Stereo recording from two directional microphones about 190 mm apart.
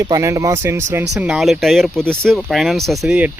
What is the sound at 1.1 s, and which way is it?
Speech, 5° right (ahead or behind).